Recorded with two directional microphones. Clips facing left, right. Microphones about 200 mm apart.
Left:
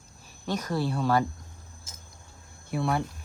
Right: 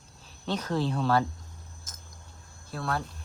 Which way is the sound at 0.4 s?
10° left (ahead or behind).